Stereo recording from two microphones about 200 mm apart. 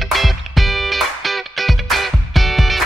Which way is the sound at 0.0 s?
Centre (ahead or behind).